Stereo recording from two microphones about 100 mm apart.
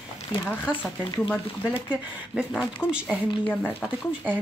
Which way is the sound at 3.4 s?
15° left (ahead or behind).